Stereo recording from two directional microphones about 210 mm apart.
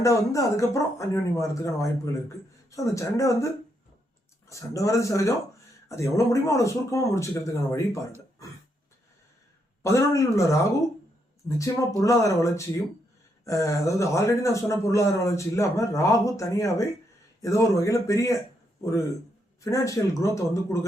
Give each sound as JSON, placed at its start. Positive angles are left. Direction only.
{"t": 0.0, "sound": "speech", "side_deg": 15}
{"t": 9.8, "sound": "speech", "side_deg": 15}
{"t": 19.6, "sound": "speech", "side_deg": 15}